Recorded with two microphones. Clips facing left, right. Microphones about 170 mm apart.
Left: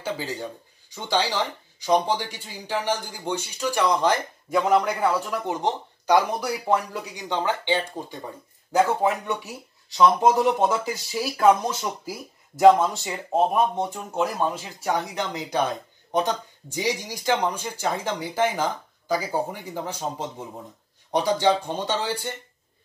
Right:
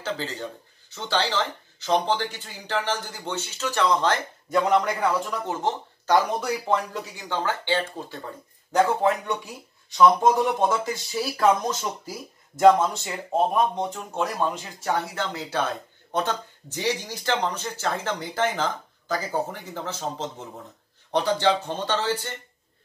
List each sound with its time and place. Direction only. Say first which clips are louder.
0.0 s speech: left 1 dB; 10° left (ahead or behind)
5.4 s speech: left 1 dB; 15° left (ahead or behind)
6.1 s speech: even; 5° left (ahead or behind)
8.7 s speech: even; 5° left (ahead or behind)
9.9 s speech: even; 15° left (ahead or behind)
10.6 s speech: left 1 dB; 5° left (ahead or behind)